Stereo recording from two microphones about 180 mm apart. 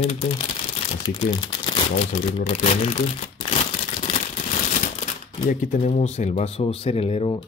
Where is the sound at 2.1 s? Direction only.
40° left (ahead or behind).